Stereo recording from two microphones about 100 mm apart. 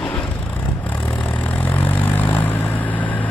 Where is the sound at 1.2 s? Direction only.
15° left (ahead or behind).